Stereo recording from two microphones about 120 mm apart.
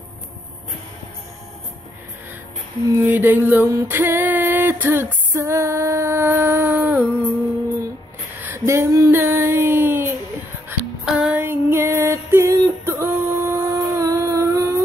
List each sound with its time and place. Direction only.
2.9 s music: 20° right (ahead or behind)
8.4 s a sound: 20° right (ahead or behind)
10.7 s music: 20° right (ahead or behind)
11.1 s female singing: 10° right (ahead or behind)